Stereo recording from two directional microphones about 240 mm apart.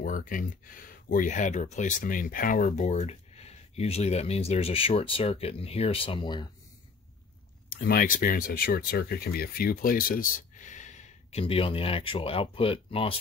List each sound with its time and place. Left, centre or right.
0.0 s speech: left; by 6.5 s centre
7.7 s speech: left